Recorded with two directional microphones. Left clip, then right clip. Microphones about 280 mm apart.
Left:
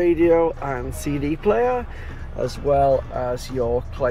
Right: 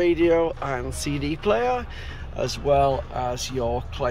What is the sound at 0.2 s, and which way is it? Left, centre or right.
Speech, centre.